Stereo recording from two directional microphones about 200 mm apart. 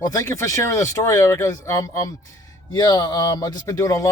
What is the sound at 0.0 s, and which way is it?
Speech, 15° left (ahead or behind).